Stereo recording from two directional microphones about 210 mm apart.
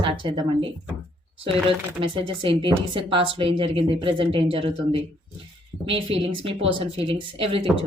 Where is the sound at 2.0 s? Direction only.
25° right (ahead or behind).